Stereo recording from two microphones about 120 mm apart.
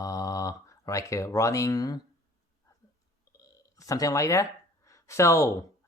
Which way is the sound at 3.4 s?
30° left (ahead or behind).